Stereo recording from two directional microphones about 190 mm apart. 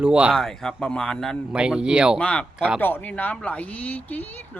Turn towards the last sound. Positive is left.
turn(degrees=10)  # may be behind; listen again after turning